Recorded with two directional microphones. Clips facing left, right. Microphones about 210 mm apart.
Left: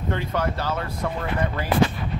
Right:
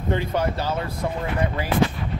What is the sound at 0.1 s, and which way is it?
Speech, 20° right (ahead or behind).